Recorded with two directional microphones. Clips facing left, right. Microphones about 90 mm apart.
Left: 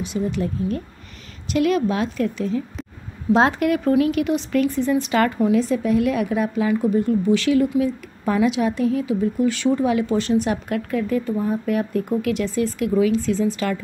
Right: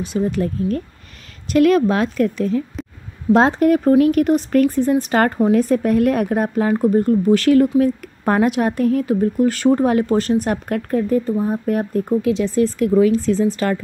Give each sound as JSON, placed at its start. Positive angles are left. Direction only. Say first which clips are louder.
{"t": 0.3, "sound": "speech", "louder": "right 3 dB", "side_deg": -50}
{"t": 3.4, "sound": "speech", "louder": "right 5 dB", "side_deg": -40}
{"t": 12.2, "sound": "speech", "louder": "right 4 dB", "side_deg": -25}
{"t": 12.5, "sound": "speech", "louder": "right 6 dB", "side_deg": -40}